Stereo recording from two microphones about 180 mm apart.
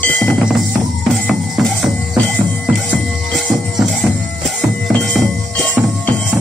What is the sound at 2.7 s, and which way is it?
Music, centre (ahead or behind).